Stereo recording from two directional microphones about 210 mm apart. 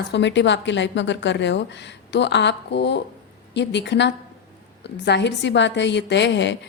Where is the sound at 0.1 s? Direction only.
55° left (ahead or behind).